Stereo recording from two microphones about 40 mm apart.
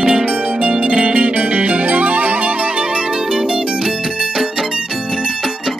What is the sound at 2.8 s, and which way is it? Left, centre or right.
Music, right.